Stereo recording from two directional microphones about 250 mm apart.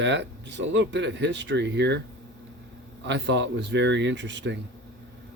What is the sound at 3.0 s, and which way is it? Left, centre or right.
Speech, right.